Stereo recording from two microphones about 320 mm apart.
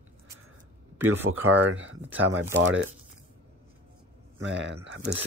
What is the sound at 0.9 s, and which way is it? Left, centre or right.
Speech, centre.